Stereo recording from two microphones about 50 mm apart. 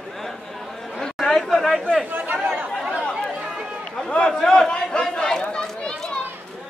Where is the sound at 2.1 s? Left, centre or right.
Right.